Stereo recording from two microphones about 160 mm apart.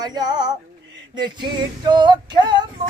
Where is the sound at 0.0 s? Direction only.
25° right (ahead or behind).